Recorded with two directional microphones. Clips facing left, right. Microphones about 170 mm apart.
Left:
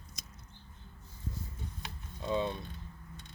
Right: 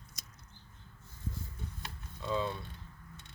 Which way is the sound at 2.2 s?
20° left (ahead or behind).